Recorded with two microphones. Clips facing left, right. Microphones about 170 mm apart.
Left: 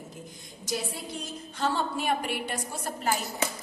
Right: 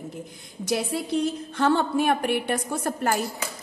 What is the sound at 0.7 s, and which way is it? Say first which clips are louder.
A woman's voice: right 8 dB; 65° right (ahead or behind).